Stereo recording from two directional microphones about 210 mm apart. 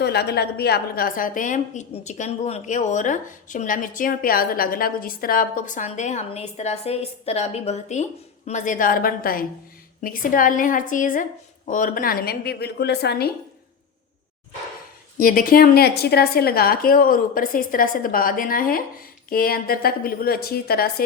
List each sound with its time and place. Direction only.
0.0 s a woman's voice: 50° left (ahead or behind)
15.2 s a woman's voice: 40° left (ahead or behind)